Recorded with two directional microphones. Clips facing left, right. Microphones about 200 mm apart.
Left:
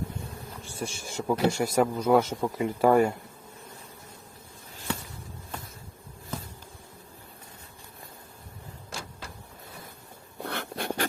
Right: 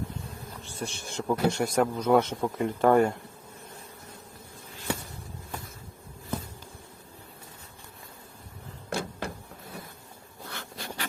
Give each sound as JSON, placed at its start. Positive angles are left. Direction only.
{"t": 0.6, "sound": "a man's voice", "side_deg": 10}
{"t": 8.9, "sound": "a sound", "side_deg": -60}
{"t": 10.4, "sound": "writing", "side_deg": 60}